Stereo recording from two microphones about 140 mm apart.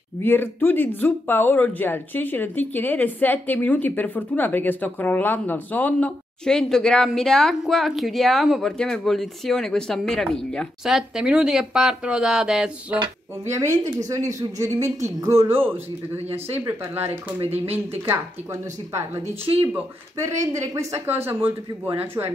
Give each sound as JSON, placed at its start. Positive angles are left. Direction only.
{"t": 0.2, "sound": "speech", "side_deg": 15}
{"t": 13.5, "sound": "a woman's voice", "side_deg": -20}